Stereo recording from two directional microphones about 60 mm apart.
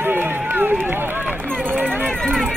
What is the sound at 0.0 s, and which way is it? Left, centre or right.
Run, right.